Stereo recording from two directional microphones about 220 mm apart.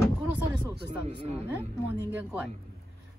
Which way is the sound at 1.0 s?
25° right (ahead or behind).